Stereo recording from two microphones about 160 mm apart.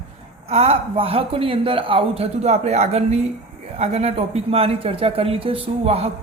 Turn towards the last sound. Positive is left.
turn(degrees=-40)  # may be behind; listen again after turning